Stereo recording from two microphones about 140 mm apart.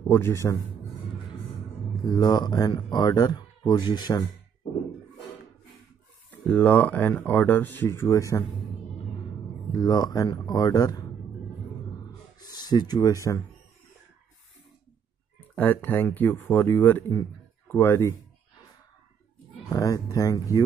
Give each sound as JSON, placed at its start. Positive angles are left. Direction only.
{"t": 0.0, "sound": "a man's voice", "side_deg": 15}
{"t": 2.0, "sound": "speech", "side_deg": 30}
{"t": 6.5, "sound": "speech", "side_deg": 10}
{"t": 9.7, "sound": "speech", "side_deg": 25}
{"t": 12.4, "sound": "speech", "side_deg": 30}
{"t": 15.5, "sound": "speech", "side_deg": 15}
{"t": 19.7, "sound": "speech", "side_deg": 25}